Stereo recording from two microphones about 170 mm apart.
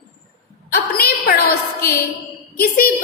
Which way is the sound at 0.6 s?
60° left (ahead or behind).